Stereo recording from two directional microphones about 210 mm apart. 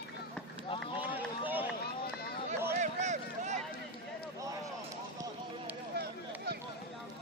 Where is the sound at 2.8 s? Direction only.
35° right (ahead or behind).